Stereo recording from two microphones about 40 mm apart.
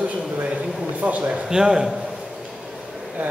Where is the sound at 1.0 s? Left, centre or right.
Right.